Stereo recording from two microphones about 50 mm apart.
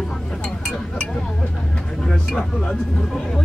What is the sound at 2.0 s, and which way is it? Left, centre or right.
Speech, centre.